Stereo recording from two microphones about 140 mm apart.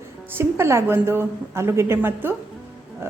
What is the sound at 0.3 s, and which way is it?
A woman's voice, 20° right (ahead or behind).